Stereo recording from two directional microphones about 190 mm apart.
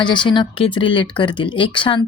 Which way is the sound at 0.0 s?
25° left (ahead or behind).